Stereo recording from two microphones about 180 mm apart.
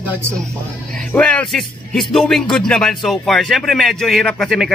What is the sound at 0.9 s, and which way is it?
Speech, 5° left (ahead or behind).